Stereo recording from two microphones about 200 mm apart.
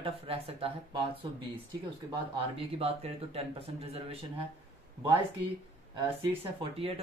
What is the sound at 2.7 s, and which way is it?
A man's voice, 30° right (ahead or behind).